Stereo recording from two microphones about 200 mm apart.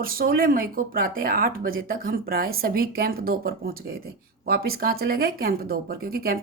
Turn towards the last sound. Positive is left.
turn(degrees=-50)  # may be behind; listen again after turning